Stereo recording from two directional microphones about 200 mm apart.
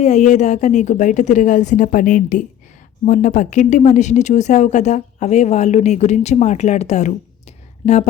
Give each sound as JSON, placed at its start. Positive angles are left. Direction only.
{"t": 0.0, "sound": "speech", "side_deg": 35}